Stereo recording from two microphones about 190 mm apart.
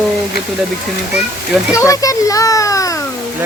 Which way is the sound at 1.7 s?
15° left (ahead or behind).